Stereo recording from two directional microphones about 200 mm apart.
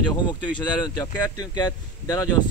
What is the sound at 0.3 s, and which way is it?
Speech, 20° left (ahead or behind).